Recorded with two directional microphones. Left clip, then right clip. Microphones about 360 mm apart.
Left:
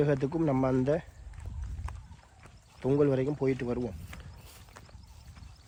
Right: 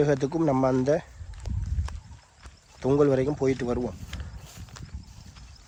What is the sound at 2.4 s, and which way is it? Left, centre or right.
Speech, centre.